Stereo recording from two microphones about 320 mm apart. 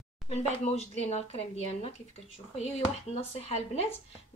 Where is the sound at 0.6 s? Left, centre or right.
Centre.